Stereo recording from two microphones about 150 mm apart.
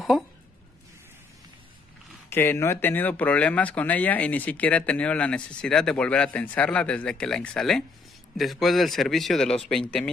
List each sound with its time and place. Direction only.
2.2 s speech: 15° left (ahead or behind)